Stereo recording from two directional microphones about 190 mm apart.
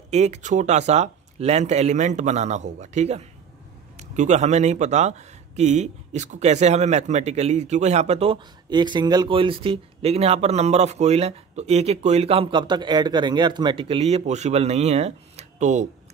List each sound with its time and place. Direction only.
0.1 s speech: 35° right (ahead or behind)